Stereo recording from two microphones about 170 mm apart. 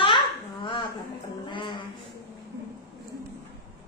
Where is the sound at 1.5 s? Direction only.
30° left (ahead or behind).